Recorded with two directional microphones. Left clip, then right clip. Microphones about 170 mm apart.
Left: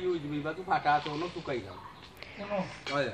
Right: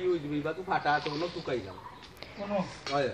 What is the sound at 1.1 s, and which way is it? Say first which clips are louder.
Speech: right 2 dB; 20° right (ahead or behind).